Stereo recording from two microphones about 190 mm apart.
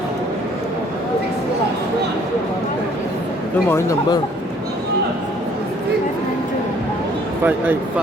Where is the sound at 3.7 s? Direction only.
15° left (ahead or behind).